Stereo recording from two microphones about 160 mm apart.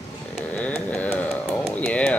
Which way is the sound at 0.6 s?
10° left (ahead or behind).